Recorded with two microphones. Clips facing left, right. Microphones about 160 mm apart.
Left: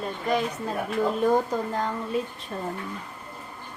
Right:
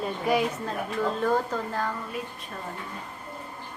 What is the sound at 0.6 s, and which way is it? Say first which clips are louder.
Speech: left 2 dB; 15° left (ahead or behind).